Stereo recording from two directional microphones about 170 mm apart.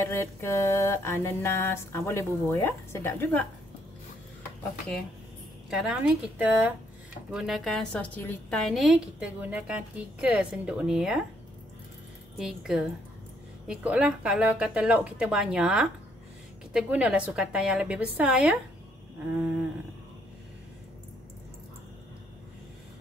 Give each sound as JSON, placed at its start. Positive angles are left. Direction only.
{"t": 0.0, "sound": "mantra", "side_deg": 15}
{"t": 5.7, "sound": "a woman's voice", "side_deg": -5}
{"t": 12.4, "sound": "a woman's voice", "side_deg": 0}